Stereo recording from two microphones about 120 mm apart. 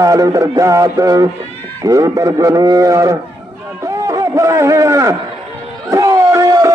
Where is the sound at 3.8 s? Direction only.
30° right (ahead or behind).